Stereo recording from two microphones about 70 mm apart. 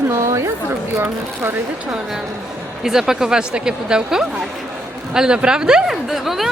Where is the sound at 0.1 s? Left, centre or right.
Right.